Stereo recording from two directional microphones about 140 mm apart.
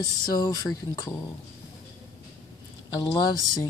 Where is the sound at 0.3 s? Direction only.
30° left (ahead or behind).